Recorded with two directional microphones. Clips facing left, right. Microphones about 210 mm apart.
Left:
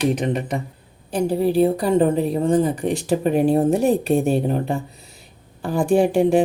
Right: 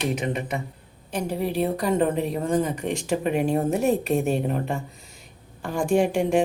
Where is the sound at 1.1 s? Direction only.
35° left (ahead or behind).